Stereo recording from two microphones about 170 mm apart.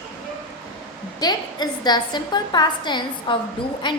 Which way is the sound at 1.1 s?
25° left (ahead or behind).